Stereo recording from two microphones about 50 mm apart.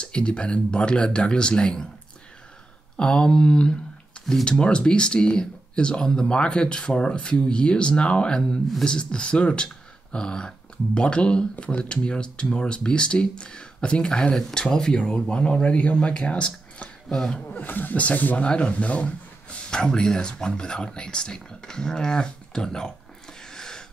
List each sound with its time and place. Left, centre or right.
0.0 s speech: centre
3.0 s speech: centre
17.1 s speech: centre
17.4 s speech: left
18.5 s speech: left
23.4 s a sound: centre